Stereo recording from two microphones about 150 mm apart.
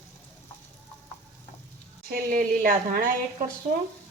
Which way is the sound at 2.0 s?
65° right (ahead or behind).